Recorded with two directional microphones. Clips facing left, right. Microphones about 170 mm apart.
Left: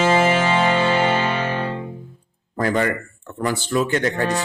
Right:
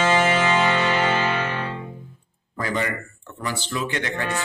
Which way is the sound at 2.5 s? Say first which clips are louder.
Left 6 dB; 45° left (ahead or behind).